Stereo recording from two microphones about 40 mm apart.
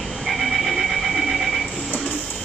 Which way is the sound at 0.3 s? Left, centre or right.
Centre.